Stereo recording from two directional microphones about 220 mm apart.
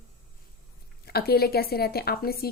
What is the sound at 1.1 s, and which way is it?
Speech, 45° left (ahead or behind).